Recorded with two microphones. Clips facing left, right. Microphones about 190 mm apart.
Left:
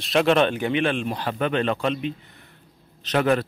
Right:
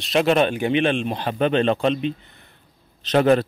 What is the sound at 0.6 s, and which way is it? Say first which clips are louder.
Speech: right 3 dB; 20° right (ahead or behind).